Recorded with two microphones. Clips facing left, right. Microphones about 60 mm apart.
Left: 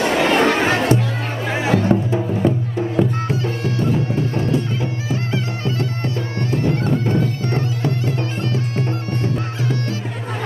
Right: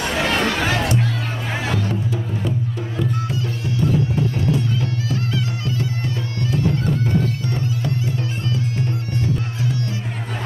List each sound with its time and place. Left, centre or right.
0.0 s chatter: left
1.7 s music: left
4.7 s music: left
5.7 s bagpipes: left
8.5 s music: left